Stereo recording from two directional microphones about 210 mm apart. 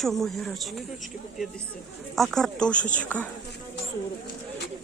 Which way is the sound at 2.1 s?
Centre (ahead or behind).